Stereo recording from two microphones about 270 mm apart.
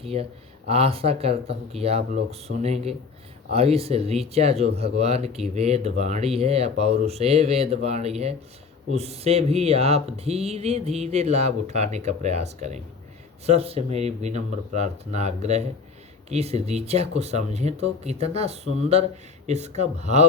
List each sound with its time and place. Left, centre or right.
0.0 s speech: right